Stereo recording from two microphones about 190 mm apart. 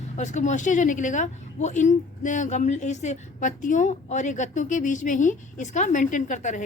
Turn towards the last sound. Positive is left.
turn(degrees=40)  # may be behind; listen again after turning